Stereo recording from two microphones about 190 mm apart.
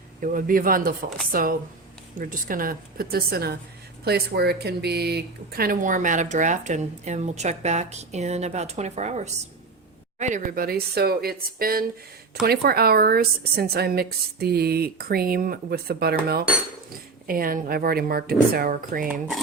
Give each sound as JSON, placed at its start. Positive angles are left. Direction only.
{"t": 0.2, "sound": "a woman's voice", "side_deg": -45}